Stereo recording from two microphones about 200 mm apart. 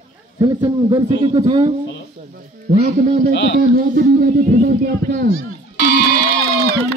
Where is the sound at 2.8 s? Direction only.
40° right (ahead or behind).